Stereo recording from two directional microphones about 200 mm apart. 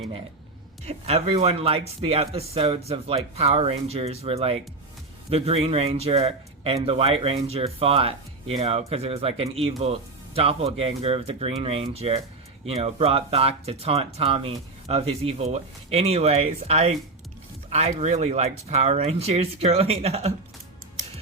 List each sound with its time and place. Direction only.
0.9 s speech: 30° right (ahead or behind)